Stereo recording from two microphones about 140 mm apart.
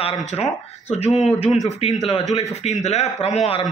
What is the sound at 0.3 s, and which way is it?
Speech, 50° left (ahead or behind).